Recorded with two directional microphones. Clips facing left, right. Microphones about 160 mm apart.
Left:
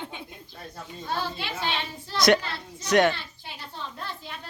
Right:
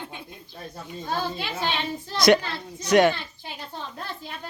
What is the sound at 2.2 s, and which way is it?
Speech, centre (ahead or behind).